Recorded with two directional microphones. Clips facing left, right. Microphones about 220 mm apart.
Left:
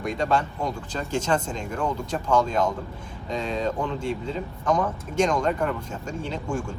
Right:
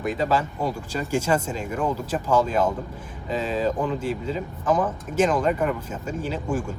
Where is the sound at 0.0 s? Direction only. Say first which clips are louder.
Right 1 dB; 5° right (ahead or behind).